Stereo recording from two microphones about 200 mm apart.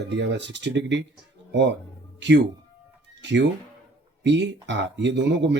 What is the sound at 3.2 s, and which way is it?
Speech, 60° right (ahead or behind).